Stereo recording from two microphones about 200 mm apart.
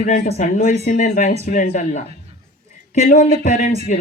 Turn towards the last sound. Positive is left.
turn(degrees=40)  # may be behind; listen again after turning